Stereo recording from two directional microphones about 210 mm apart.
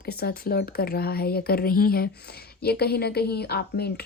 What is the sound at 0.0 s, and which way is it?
Speech, 50° left (ahead or behind).